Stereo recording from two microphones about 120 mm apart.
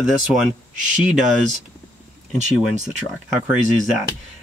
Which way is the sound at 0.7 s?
90° right.